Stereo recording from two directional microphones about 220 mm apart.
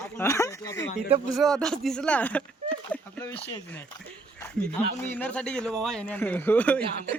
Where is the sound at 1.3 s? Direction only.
Centre (ahead or behind).